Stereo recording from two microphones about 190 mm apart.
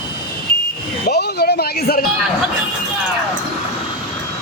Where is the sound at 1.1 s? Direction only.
55° left (ahead or behind).